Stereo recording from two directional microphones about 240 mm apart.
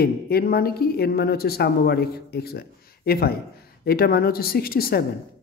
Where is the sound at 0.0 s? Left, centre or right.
Left.